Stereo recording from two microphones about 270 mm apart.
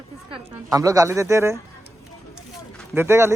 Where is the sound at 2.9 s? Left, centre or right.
Centre.